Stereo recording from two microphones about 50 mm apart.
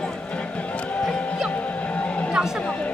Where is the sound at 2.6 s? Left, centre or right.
Left.